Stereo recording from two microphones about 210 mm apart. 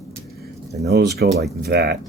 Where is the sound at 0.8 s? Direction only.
50° right (ahead or behind).